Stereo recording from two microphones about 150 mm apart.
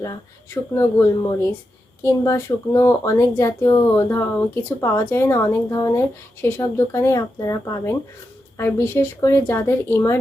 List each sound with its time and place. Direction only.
0.0 s speech: 20° left (ahead or behind)